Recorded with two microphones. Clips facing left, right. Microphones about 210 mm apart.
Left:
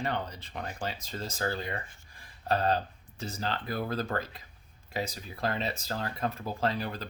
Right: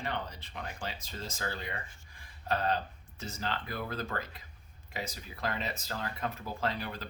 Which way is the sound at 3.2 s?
35° left (ahead or behind).